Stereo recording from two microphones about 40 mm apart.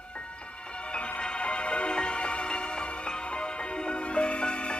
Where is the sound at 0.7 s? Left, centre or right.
Left.